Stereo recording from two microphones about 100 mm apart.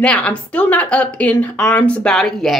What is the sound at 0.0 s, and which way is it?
A woman's voice, 10° left (ahead or behind).